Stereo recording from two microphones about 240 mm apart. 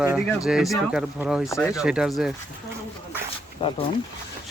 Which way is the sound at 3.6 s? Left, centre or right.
Centre.